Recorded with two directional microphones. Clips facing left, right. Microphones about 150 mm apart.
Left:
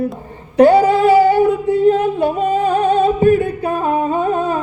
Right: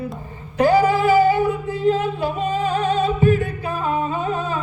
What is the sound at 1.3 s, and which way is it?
Music, 60° left (ahead or behind).